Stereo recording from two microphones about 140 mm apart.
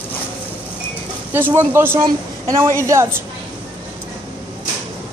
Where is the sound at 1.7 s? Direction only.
15° right (ahead or behind).